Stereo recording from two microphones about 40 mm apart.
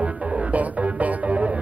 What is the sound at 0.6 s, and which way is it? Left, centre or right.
Music, right.